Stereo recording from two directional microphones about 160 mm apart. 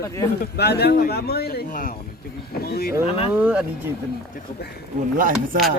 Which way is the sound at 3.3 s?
10° right (ahead or behind).